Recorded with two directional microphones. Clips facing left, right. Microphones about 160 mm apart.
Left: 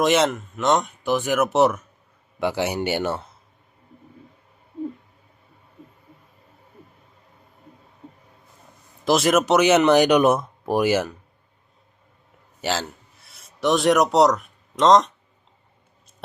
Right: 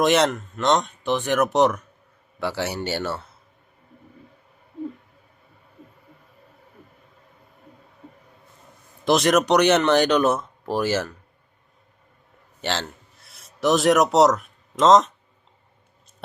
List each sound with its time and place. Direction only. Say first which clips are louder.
0.0 s speech: even; centre (ahead or behind)
2.4 s speech: left 3 dB; 15° left (ahead or behind)
9.0 s speech: even; centre (ahead or behind)
12.6 s a man's voice: left 2 dB; 5° left (ahead or behind)